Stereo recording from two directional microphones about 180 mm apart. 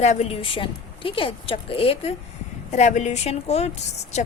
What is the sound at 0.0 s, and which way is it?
A woman's voice, 40° left (ahead or behind).